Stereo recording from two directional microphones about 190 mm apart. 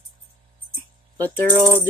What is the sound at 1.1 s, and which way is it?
Speech, 10° left (ahead or behind).